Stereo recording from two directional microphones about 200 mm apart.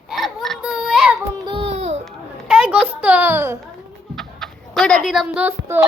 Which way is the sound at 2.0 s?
5° right (ahead or behind).